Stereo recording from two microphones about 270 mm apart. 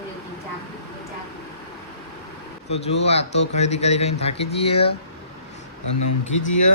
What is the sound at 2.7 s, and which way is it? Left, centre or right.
Speech, left.